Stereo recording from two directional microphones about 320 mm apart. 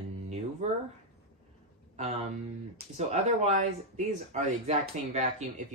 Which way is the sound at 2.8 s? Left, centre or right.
Right.